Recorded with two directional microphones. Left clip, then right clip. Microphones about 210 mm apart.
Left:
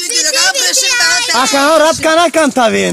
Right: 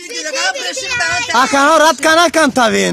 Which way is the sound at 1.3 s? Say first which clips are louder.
Right 3 dB; 15° right (ahead or behind).